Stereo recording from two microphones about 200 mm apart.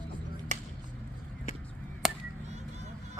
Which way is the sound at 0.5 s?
35° right (ahead or behind).